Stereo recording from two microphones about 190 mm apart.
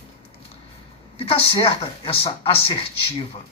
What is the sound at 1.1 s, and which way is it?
Speech, 30° left (ahead or behind).